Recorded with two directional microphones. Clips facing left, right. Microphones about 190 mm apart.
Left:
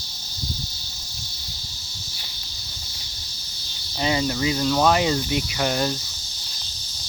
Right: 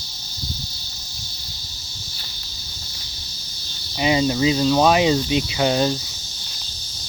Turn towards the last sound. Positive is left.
turn(degrees=-20)  # may be behind; listen again after turning